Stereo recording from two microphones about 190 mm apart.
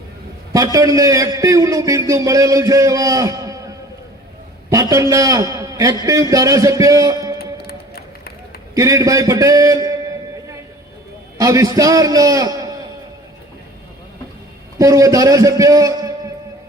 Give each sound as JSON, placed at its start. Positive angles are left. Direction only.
{"t": 0.5, "sound": "a man's voice", "side_deg": -20}
{"t": 7.3, "sound": "music", "side_deg": 55}
{"t": 8.7, "sound": "a man's voice", "side_deg": -15}
{"t": 11.3, "sound": "a man's voice", "side_deg": -15}
{"t": 14.8, "sound": "a man's voice", "side_deg": -15}